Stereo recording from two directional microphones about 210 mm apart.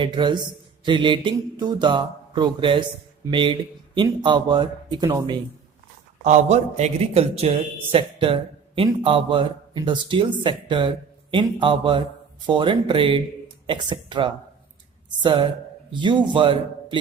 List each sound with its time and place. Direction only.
0.0 s a man's voice: 20° right (ahead or behind)
6.2 s a man's voice: 35° right (ahead or behind)